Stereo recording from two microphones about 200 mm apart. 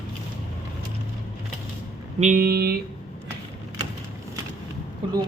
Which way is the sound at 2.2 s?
40° right (ahead or behind).